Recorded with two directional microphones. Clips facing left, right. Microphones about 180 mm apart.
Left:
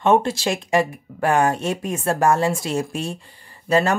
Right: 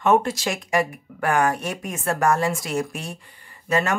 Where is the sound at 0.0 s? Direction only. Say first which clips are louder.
Left 2 dB; 25° left (ahead or behind).